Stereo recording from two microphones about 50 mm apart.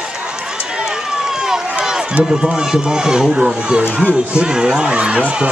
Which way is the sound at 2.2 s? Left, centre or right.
Centre.